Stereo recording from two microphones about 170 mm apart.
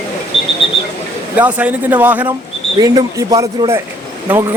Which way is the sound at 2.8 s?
20° right (ahead or behind).